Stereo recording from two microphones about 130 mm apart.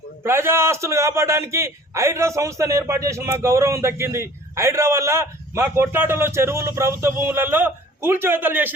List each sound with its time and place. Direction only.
0.2 s a man's voice: 20° right (ahead or behind)